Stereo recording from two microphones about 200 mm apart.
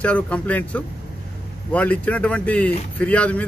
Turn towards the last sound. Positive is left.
turn(degrees=5)  # may be behind; listen again after turning